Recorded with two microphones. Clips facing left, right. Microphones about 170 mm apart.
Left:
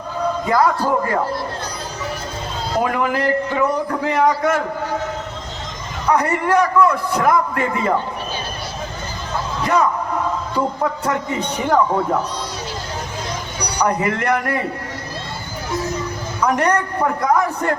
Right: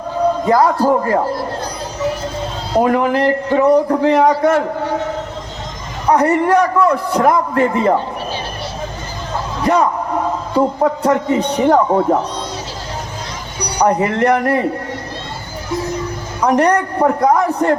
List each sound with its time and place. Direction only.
0.4 s a man's voice: 35° right (ahead or behind)
2.7 s a man's voice: 35° right (ahead or behind)
6.1 s a man's voice: 35° right (ahead or behind)
10.5 s a man's voice: 35° right (ahead or behind)
13.7 s a man's voice: 35° right (ahead or behind)
16.4 s a man's voice: 35° right (ahead or behind)